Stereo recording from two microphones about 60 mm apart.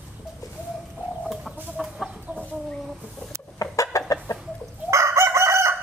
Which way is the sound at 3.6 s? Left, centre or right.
Left.